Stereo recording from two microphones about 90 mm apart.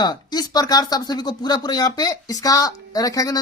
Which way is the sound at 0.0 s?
45° left (ahead or behind).